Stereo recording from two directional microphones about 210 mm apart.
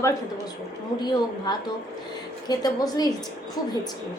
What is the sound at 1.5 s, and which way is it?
A woman's voice, 20° left (ahead or behind).